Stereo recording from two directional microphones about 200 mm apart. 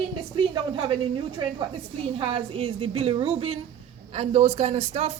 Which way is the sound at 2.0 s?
25° right (ahead or behind).